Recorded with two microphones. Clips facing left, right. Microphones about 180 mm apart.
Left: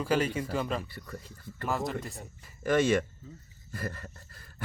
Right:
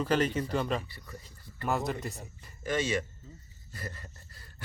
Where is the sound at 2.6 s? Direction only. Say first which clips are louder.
Left 6 dB; 55° left (ahead or behind).